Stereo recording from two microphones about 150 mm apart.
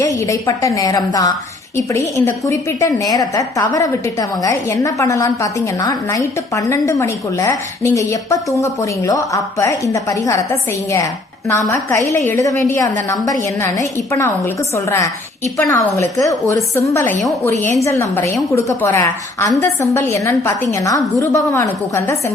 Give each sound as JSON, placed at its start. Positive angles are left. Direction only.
{"t": 0.0, "sound": "a woman's voice", "side_deg": 20}